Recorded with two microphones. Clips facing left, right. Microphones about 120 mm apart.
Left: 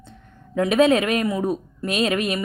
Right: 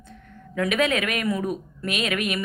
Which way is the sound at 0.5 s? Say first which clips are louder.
Left 6 dB; 30° left (ahead or behind).